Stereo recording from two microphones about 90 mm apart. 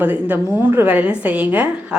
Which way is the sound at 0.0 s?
20° right (ahead or behind).